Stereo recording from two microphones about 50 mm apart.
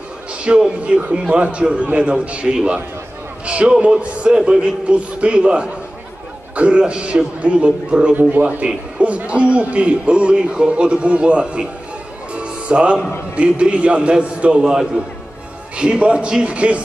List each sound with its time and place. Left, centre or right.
0.4 s a man's voice: right
8.2 s a man's voice: right
12.4 s music: right
13.4 s a man's voice: right
14.6 s a man's voice: centre